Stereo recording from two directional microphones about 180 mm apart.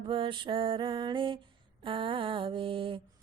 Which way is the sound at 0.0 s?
30° right (ahead or behind).